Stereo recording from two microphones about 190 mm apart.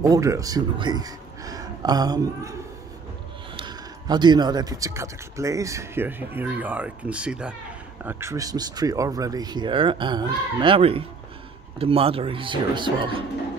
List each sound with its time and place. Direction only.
0.0 s speech: 15° right (ahead or behind)
3.5 s speech: 25° right (ahead or behind)